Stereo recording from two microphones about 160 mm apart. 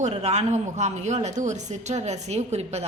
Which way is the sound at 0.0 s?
45° right (ahead or behind).